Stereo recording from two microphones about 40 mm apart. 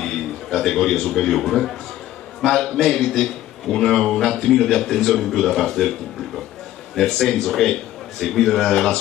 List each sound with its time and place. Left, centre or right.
0.0 s a man's voice: centre